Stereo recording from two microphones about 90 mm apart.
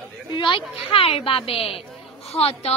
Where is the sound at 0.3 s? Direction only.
60° left (ahead or behind).